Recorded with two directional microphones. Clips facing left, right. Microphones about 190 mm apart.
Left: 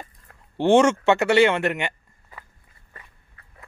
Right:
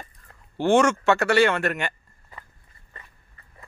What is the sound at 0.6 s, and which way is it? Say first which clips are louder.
Speech: left 3 dB; 25° left (ahead or behind).